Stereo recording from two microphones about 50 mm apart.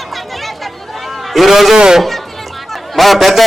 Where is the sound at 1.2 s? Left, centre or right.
Centre.